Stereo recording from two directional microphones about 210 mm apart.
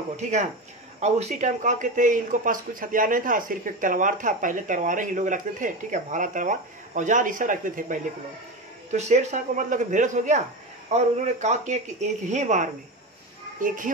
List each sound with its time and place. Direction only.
0.2 s speech: 35° right (ahead or behind)